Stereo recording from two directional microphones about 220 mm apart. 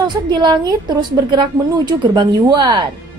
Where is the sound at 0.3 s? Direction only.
20° right (ahead or behind).